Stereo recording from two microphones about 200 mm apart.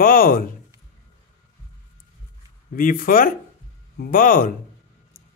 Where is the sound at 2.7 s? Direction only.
45° left (ahead or behind).